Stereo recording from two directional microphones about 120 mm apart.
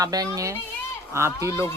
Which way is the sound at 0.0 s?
30° right (ahead or behind).